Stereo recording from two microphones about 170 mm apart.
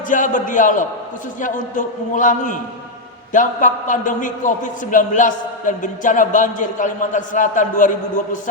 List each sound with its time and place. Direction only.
0.1 s a man's voice: 50° left (ahead or behind)